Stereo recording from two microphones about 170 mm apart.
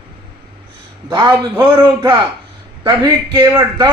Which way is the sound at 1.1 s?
25° right (ahead or behind).